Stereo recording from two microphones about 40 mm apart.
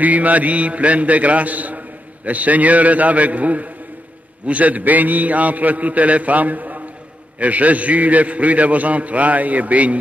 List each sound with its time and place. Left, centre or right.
0.0 s a man's voice: right